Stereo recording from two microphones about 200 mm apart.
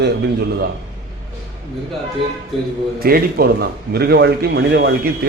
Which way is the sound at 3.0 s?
50° right (ahead or behind).